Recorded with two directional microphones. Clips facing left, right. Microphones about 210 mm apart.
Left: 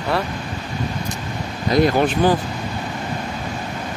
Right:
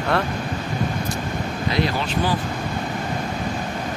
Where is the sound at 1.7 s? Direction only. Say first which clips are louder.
Left 8 dB; 50° left (ahead or behind).